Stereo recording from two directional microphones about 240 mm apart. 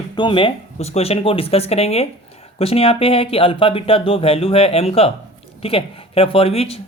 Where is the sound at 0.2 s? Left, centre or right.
Left.